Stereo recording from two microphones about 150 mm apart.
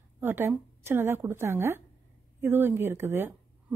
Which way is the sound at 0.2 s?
15° right (ahead or behind).